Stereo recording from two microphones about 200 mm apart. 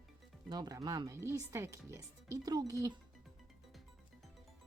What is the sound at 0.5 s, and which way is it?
Speech, 20° right (ahead or behind).